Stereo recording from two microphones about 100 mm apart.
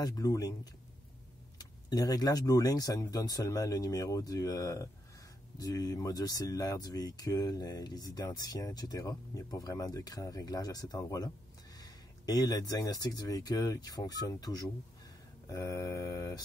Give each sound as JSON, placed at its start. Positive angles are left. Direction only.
{"t": 0.0, "sound": "speech", "side_deg": 40}
{"t": 1.6, "sound": "speech", "side_deg": 40}